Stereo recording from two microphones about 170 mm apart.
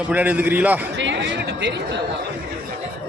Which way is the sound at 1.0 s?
90° right.